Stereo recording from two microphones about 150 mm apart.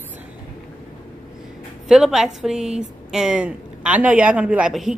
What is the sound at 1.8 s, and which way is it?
A woman's voice, centre (ahead or behind).